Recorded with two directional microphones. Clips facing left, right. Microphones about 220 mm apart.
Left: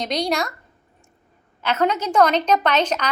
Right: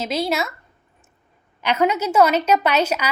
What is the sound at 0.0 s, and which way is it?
Speech, 5° right (ahead or behind).